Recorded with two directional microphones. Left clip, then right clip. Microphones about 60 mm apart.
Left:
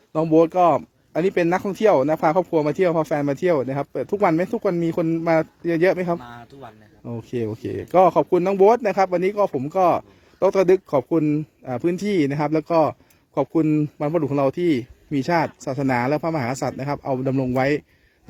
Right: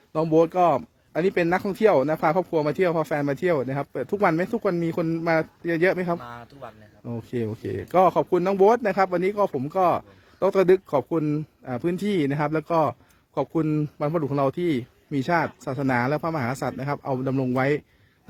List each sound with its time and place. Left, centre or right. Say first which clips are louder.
0.1 s speech: left 3 dB; centre
6.2 s a man's voice: even; right
7.0 s speech: left 3 dB; centre
13.3 s speech: left 4 dB; centre
13.7 s speech: left 4 dB; centre; by 17.1 s left
17.1 s speech: left 4 dB; centre
17.5 s speech: left 2 dB; centre